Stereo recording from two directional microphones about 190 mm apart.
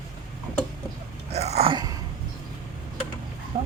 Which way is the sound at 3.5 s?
45° right (ahead or behind).